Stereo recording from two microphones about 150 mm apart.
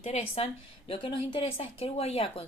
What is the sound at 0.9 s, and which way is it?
A woman's voice, 35° left (ahead or behind).